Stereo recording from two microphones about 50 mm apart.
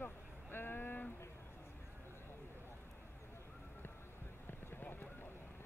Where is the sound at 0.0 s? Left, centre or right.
Left.